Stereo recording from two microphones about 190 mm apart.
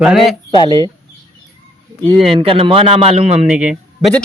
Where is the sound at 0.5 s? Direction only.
20° left (ahead or behind).